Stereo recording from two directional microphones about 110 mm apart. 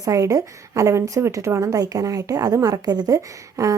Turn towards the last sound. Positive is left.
turn(degrees=-30)  # may be behind; listen again after turning